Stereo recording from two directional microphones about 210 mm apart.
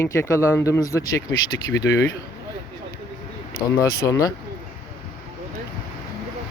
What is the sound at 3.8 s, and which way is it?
Speech, 15° left (ahead or behind).